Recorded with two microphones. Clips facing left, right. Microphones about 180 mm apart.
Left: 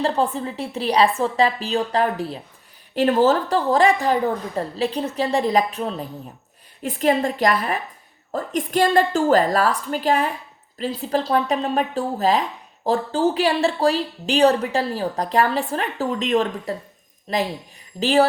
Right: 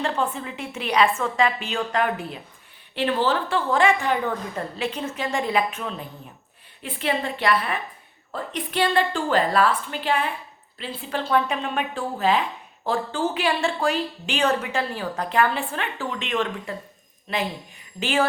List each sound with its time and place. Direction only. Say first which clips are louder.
0.0 s speech: left 4 dB; 35° left (ahead or behind)